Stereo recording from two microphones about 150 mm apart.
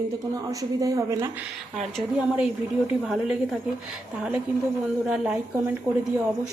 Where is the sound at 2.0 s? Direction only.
5° right (ahead or behind).